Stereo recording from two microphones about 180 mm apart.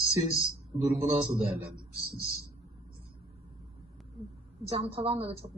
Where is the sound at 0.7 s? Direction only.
30° right (ahead or behind).